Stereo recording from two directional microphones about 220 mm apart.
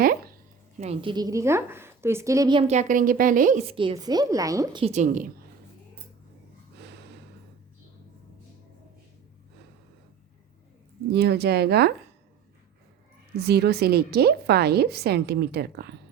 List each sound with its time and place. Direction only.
0.0 s a sound: 40° right (ahead or behind)
0.8 s a woman's voice: 25° right (ahead or behind)
3.8 s a woman's voice: 20° right (ahead or behind)
11.1 s a woman's voice: 45° right (ahead or behind)
13.3 s a woman's voice: 45° right (ahead or behind)